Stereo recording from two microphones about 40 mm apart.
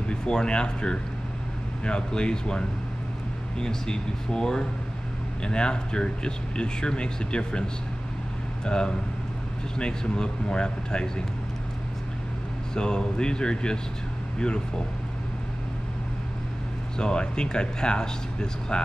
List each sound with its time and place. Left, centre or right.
0.1 s speech: centre
12.7 s speech: centre
17.0 s speech: left